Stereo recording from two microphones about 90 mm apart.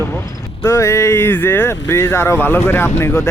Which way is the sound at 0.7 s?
35° left (ahead or behind).